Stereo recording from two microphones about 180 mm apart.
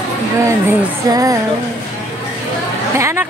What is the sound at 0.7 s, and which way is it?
Music, 20° right (ahead or behind).